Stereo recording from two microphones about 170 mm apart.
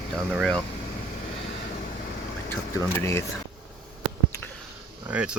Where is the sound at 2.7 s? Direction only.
15° left (ahead or behind).